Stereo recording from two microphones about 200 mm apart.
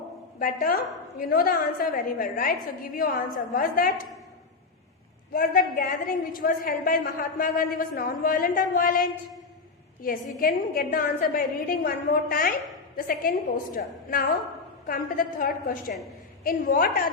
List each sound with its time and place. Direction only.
0.3 s a woman's voice: 45° left (ahead or behind)
5.3 s a woman's voice: 45° left (ahead or behind)